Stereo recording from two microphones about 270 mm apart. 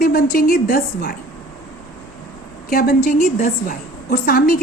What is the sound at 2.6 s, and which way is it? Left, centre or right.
A woman's voice, left.